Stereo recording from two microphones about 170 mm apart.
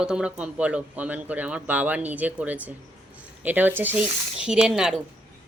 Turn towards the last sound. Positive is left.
turn(degrees=-5)  # may be behind; listen again after turning